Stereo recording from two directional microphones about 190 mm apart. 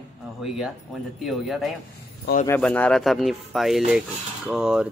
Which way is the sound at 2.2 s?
50° left (ahead or behind).